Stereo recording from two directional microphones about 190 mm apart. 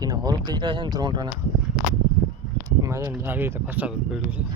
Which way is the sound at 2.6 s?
15° right (ahead or behind).